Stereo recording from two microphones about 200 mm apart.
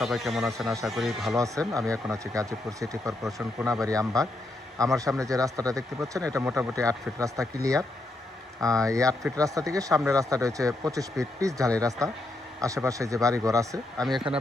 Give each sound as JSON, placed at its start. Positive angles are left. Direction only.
{"t": 0.0, "sound": "speech", "side_deg": 0}
{"t": 1.4, "sound": "speech", "side_deg": -15}